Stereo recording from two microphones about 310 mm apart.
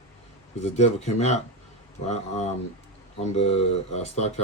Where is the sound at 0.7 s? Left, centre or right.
Left.